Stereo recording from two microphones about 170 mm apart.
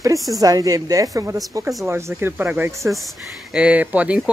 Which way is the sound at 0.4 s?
20° right (ahead or behind).